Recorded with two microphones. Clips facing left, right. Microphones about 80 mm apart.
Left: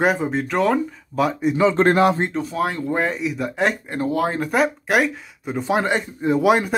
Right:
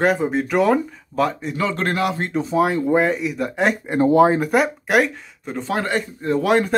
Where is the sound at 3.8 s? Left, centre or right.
Right.